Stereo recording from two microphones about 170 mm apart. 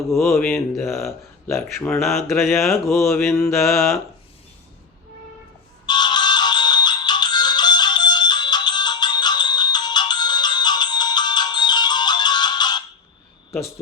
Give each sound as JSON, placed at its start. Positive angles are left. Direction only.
{"t": 0.1, "sound": "speech", "side_deg": 0}
{"t": 3.1, "sound": "mantra", "side_deg": 10}
{"t": 3.6, "sound": "speech", "side_deg": 0}
{"t": 5.8, "sound": "ringtone", "side_deg": 25}